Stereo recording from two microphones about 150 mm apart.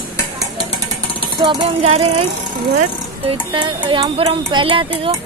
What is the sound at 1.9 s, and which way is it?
Speech, 40° right (ahead or behind).